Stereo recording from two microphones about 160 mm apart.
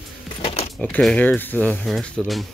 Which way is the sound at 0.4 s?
35° left (ahead or behind).